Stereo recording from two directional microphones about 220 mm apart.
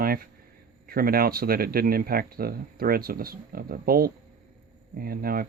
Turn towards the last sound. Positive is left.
turn(degrees=-40)  # may be behind; listen again after turning